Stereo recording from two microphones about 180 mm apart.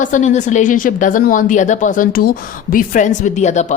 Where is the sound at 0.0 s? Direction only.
45° left (ahead or behind).